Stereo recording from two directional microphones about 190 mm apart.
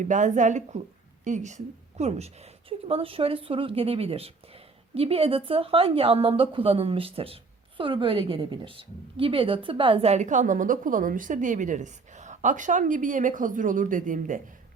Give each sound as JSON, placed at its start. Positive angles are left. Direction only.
{"t": 0.0, "sound": "a woman's voice", "side_deg": -40}